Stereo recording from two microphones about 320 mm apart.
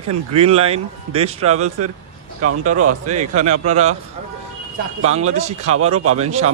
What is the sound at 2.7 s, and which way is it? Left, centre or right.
Speech, right.